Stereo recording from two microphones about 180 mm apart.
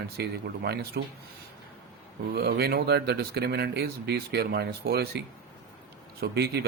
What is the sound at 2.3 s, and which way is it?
A man's voice, 65° right (ahead or behind).